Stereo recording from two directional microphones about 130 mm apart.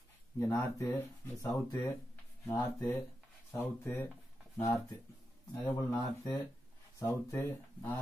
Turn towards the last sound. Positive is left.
turn(degrees=20)  # may be behind; listen again after turning